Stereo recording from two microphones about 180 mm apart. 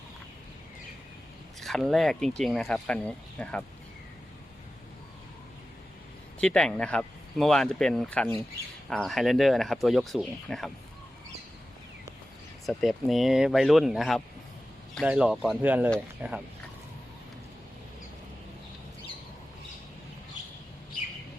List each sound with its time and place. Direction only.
1.6 s speech: centre (ahead or behind)
6.4 s speech: 5° left (ahead or behind)
12.6 s speech: centre (ahead or behind)